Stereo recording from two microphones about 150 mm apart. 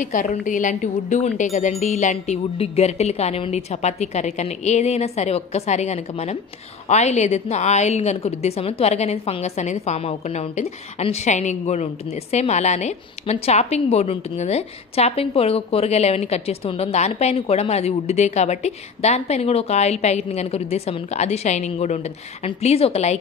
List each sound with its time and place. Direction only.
0.0 s a woman's voice: 60° left (ahead or behind); by 23.1 s 45° left (ahead or behind)